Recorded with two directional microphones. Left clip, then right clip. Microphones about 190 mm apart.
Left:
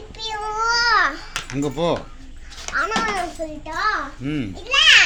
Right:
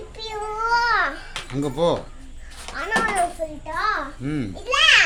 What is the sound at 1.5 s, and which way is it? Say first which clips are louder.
Speech: right 1 dB; 5° right (ahead or behind).